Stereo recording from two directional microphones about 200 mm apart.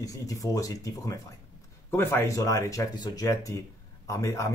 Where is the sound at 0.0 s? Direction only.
15° left (ahead or behind).